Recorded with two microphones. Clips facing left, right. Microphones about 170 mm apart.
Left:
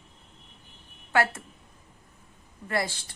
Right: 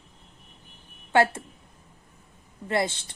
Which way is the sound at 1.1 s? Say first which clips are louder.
Right 4 dB; 25° right (ahead or behind).